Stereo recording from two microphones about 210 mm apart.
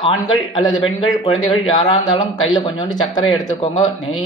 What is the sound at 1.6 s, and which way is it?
Speech, 25° left (ahead or behind).